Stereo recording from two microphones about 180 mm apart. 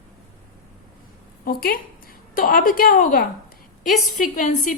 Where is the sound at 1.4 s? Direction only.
55° left (ahead or behind).